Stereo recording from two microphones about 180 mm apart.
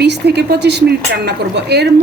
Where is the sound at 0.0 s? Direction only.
70° right (ahead or behind).